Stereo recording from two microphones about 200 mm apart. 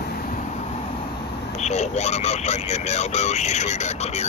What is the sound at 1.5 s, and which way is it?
Speech, 35° left (ahead or behind).